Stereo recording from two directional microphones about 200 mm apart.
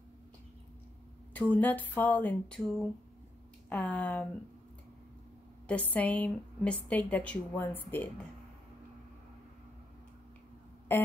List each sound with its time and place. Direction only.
1.3 s a woman's voice: 10° left (ahead or behind)
5.7 s a woman's voice: 10° left (ahead or behind)
10.9 s a woman's voice: 10° left (ahead or behind)